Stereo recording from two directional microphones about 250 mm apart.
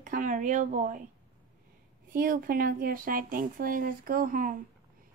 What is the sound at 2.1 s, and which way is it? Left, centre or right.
A woman's voice, right.